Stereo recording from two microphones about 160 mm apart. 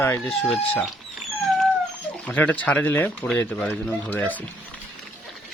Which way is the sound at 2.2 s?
10° left (ahead or behind).